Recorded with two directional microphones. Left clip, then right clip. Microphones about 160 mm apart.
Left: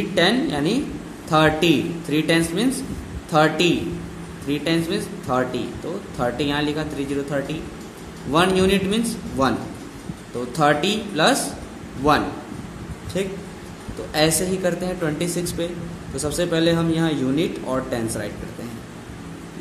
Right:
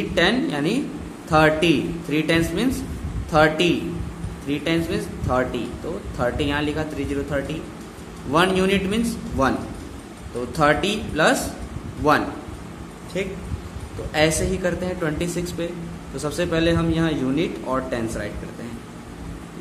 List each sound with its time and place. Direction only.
0.1 s a man's voice: 15° left (ahead or behind)